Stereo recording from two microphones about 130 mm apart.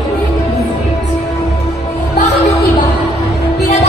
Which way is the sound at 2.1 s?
65° left (ahead or behind).